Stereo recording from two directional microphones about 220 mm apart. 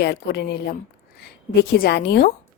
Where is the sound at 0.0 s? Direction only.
50° left (ahead or behind).